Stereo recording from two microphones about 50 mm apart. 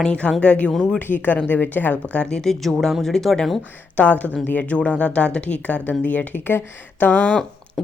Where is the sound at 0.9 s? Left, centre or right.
Left.